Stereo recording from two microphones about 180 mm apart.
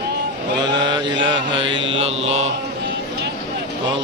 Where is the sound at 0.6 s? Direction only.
25° right (ahead or behind).